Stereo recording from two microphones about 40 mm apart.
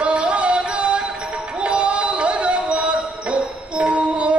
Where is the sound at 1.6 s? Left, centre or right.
Right.